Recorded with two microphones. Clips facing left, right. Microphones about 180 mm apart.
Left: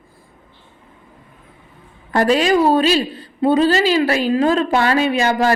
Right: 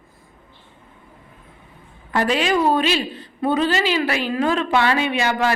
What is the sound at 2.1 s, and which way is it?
A woman's voice, 40° left (ahead or behind).